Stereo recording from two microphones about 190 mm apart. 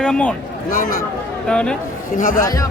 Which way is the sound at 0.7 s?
50° left (ahead or behind).